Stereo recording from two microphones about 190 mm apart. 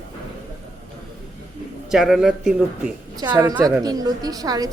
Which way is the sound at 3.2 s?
20° right (ahead or behind).